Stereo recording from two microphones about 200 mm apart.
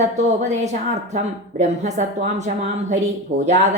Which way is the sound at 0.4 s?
35° right (ahead or behind).